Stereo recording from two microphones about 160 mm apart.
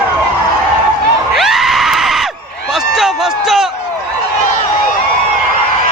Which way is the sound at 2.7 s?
Centre (ahead or behind).